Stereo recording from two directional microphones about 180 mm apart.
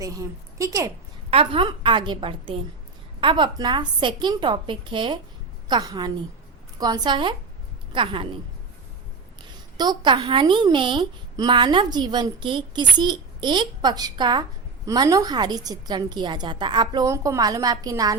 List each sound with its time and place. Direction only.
0.0 s a woman's voice: 20° right (ahead or behind)
1.3 s a woman's voice: 30° right (ahead or behind)
9.7 s a woman's voice: 25° right (ahead or behind)